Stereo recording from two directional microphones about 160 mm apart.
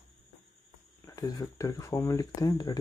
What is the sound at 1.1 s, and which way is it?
Speech, 20° left (ahead or behind).